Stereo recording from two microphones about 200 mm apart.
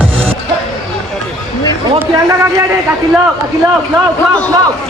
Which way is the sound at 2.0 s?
15° right (ahead or behind).